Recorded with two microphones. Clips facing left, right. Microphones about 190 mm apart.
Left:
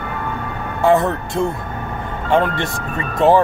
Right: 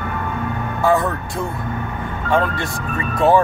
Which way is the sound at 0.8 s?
25° left (ahead or behind).